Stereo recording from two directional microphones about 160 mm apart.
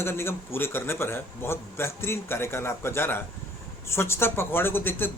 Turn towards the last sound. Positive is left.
turn(degrees=15)  # may be behind; listen again after turning